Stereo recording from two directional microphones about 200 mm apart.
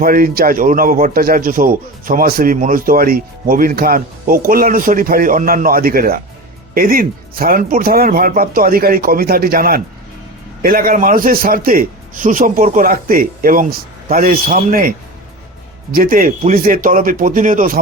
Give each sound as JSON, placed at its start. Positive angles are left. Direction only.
{"t": 0.0, "sound": "a man's voice", "side_deg": -45}